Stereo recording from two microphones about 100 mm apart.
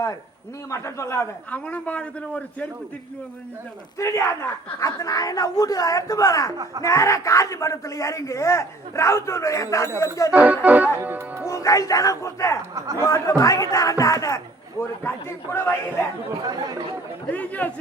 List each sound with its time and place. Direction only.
0.7 s a man's voice: 30° left (ahead or behind)
1.5 s a man's voice: 15° left (ahead or behind)
3.9 s speech: 30° left (ahead or behind)
10.3 s music: 15° right (ahead or behind)
11.4 s a man's voice: 30° left (ahead or behind)
16.4 s speech: 40° right (ahead or behind)
17.3 s a man's voice: 15° left (ahead or behind)